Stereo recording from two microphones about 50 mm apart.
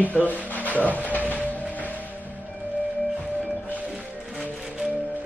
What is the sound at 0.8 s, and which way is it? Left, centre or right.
Speech, left.